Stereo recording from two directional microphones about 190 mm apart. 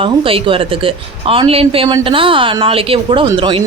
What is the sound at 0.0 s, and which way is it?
Speech, 30° right (ahead or behind).